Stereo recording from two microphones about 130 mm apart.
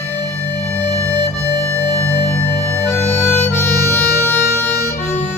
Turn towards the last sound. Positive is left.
turn(degrees=15)  # may be behind; listen again after turning